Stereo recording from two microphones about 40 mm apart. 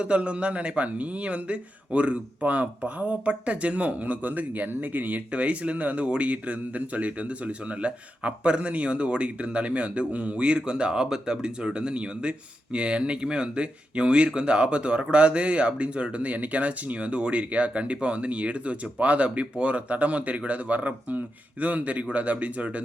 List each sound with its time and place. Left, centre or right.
0.0 s speech: right
2.4 s speech: right
5.3 s speech: right